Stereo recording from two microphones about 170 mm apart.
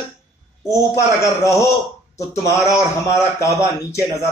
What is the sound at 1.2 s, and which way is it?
Speech, 20° left (ahead or behind).